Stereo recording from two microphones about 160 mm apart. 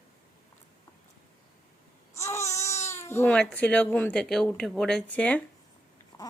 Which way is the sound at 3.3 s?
5° left (ahead or behind).